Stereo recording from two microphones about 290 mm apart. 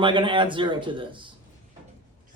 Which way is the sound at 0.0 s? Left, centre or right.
Centre.